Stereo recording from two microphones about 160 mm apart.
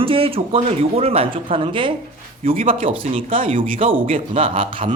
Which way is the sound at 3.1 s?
35° right (ahead or behind).